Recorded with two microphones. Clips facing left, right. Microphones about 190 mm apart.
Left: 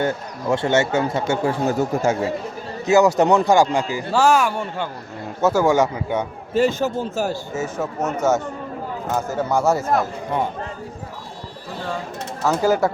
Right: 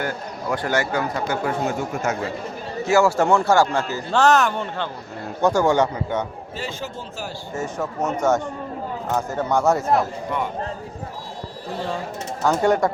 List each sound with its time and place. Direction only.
0.0 s speech: 25° left (ahead or behind)
2.8 s speech: 20° left (ahead or behind)
6.5 s a man's voice: 45° left (ahead or behind)
7.5 s speech: 5° left (ahead or behind)
9.1 s speech: 5° left (ahead or behind)
12.4 s speech: 5° left (ahead or behind)